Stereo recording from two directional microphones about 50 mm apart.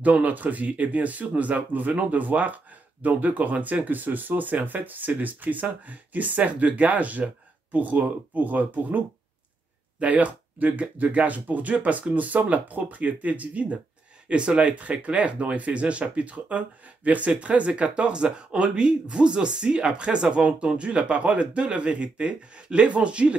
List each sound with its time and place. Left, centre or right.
0.0 s speech: right